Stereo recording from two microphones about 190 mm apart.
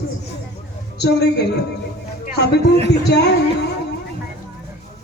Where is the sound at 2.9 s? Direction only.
60° left (ahead or behind).